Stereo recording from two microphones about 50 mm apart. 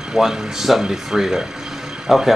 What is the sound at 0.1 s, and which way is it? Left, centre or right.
Speech, centre.